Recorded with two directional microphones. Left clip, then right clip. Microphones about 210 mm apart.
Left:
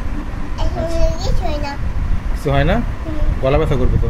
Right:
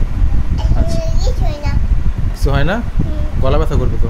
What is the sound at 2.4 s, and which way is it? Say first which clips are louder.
Speech: left 1 dB; 25° right (ahead or behind).